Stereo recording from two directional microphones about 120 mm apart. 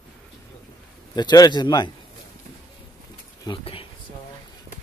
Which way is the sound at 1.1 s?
35° left (ahead or behind).